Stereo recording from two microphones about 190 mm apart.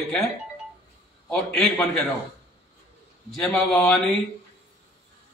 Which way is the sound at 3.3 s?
5° left (ahead or behind).